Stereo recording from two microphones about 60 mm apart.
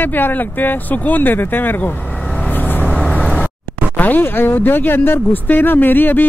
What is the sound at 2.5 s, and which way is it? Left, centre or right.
Vehicle, left.